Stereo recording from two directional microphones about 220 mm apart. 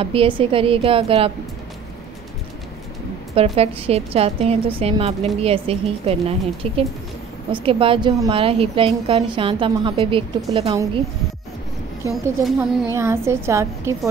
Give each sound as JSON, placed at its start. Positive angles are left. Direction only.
{"t": 0.0, "sound": "a woman's voice", "side_deg": -25}
{"t": 3.5, "sound": "a woman's voice", "side_deg": -30}
{"t": 12.1, "sound": "a woman's voice", "side_deg": 0}
{"t": 12.9, "sound": "a woman's voice", "side_deg": -10}